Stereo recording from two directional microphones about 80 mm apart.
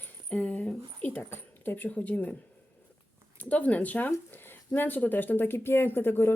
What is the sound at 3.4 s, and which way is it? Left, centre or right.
Speech, centre.